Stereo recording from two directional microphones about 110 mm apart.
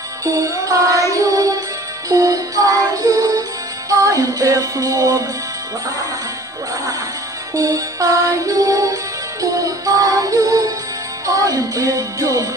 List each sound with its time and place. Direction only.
0.2 s music: 30° right (ahead or behind)
7.5 s music: 30° right (ahead or behind)